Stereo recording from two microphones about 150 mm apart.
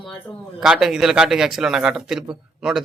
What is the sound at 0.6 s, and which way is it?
A man's voice, centre (ahead or behind).